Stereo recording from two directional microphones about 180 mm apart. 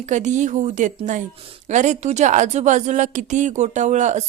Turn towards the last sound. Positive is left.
turn(degrees=-40)  # may be behind; listen again after turning